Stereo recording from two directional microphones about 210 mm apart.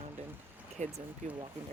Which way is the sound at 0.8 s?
35° right (ahead or behind).